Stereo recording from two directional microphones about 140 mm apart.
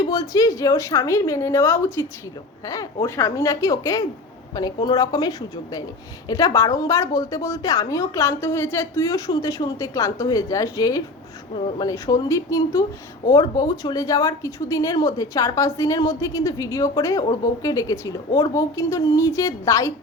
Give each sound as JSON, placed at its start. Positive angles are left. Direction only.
{"t": 0.0, "sound": "a woman's voice", "side_deg": 25}